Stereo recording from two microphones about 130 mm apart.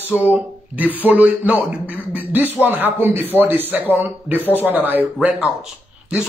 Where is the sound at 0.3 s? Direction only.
15° right (ahead or behind).